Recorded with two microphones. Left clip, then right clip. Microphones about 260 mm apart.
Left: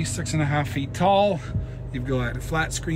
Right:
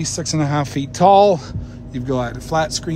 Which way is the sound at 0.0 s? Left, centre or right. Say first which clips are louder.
Right 6 dB; right.